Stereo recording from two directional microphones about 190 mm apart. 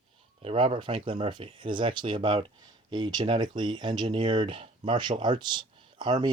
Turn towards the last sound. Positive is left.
turn(degrees=-20)  # may be behind; listen again after turning